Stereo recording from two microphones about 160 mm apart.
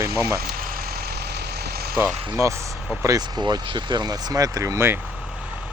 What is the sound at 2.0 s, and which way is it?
Speech, 15° right (ahead or behind).